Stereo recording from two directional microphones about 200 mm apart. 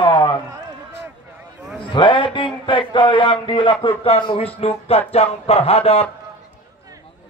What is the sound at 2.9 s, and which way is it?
Music, 25° left (ahead or behind).